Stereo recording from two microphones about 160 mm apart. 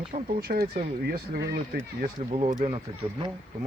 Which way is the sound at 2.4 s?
45° right (ahead or behind).